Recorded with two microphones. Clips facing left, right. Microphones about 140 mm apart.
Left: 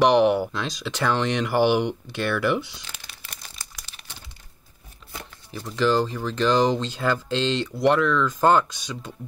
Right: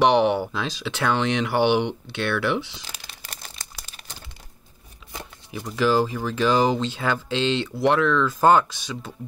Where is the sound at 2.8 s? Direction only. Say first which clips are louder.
Right 2 dB; 40° right (ahead or behind).